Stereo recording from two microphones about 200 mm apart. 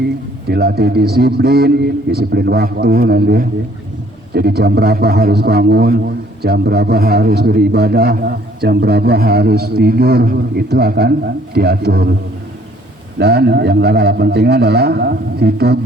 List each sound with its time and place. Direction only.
0.4 s a man's voice: 50° right (ahead or behind)
13.1 s a man's voice: 55° right (ahead or behind)